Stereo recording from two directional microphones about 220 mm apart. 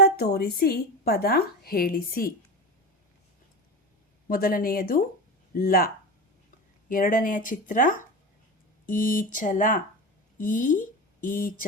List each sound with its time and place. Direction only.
0.0 s a woman's voice: 45° left (ahead or behind)
4.3 s speech: 40° left (ahead or behind)